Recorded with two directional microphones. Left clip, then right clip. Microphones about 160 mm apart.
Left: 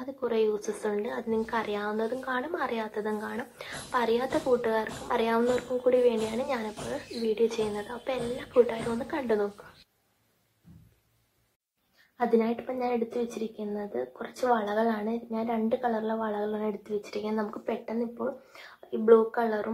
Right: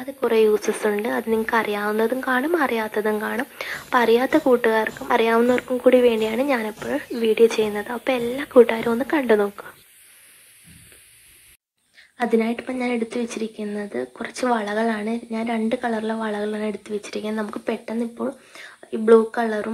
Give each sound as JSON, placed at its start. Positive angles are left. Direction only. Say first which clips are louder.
{"t": 0.2, "sound": "speech", "louder": "right 10 dB", "side_deg": -35}
{"t": 12.2, "sound": "speech", "louder": "right 5 dB", "side_deg": -25}